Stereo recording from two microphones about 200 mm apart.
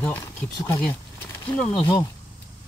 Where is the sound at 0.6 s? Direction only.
10° left (ahead or behind).